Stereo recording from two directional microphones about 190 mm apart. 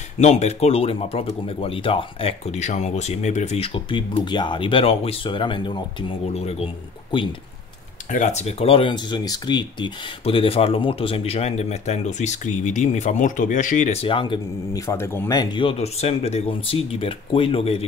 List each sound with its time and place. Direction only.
0.2 s speech: 35° left (ahead or behind)